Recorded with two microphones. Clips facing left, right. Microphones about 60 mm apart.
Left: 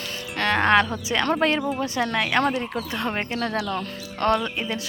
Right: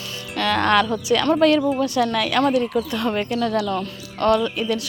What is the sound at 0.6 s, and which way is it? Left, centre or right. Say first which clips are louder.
Speech: even; left.